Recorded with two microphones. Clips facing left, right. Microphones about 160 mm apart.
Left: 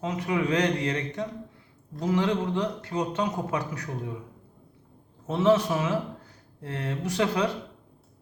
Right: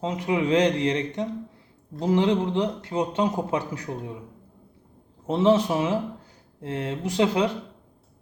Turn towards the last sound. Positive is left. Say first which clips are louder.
# right 3 dB
turn(degrees=-25)  # may be behind; listen again after turning